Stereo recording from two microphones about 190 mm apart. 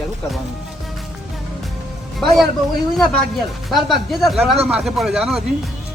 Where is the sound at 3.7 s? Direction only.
Centre (ahead or behind).